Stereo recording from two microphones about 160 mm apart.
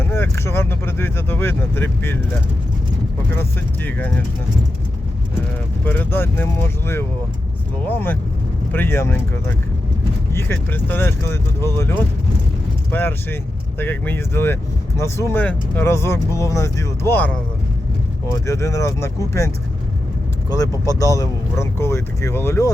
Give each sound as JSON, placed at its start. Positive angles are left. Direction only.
{"t": 0.0, "sound": "speech", "side_deg": 15}
{"t": 5.8, "sound": "speech", "side_deg": 10}
{"t": 10.3, "sound": "speech", "side_deg": 15}
{"t": 12.9, "sound": "speech", "side_deg": 10}
{"t": 18.4, "sound": "speech", "side_deg": 20}
{"t": 20.5, "sound": "speech", "side_deg": 20}